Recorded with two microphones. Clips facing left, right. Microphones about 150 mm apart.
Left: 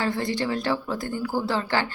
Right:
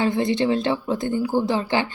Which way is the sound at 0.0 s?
20° right (ahead or behind).